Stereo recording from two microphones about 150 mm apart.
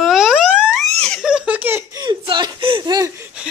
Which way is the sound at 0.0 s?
5° right (ahead or behind).